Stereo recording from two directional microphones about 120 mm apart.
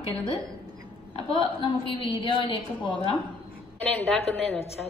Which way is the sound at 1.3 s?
40° left (ahead or behind).